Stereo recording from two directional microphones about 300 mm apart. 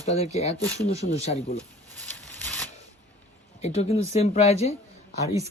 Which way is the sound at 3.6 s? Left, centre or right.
Left.